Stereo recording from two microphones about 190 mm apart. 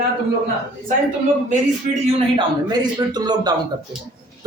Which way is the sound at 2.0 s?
25° right (ahead or behind).